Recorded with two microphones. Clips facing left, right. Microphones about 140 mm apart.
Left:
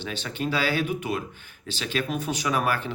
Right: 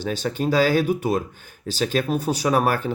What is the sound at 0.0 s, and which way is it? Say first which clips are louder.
Speech: right 6 dB; 40° right (ahead or behind).